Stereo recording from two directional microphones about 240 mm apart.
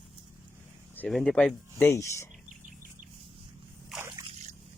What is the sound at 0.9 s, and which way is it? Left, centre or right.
Speech, centre.